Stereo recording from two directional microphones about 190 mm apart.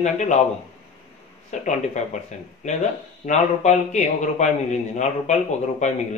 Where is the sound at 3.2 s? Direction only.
35° left (ahead or behind).